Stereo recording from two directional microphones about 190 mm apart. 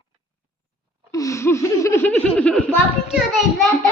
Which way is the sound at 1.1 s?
15° left (ahead or behind).